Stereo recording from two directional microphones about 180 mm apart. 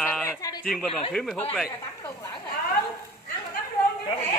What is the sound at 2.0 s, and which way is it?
Speech, 15° left (ahead or behind).